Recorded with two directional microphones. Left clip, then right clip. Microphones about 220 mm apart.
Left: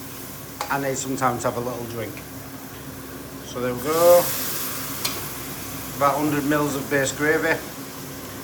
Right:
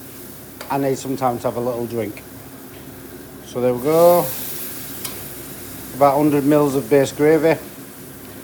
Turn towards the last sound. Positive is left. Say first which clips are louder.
# right 6 dB
turn(degrees=-20)  # may be behind; listen again after turning